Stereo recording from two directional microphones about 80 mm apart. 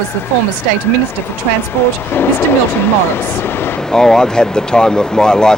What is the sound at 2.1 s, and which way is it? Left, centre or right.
Speech, left.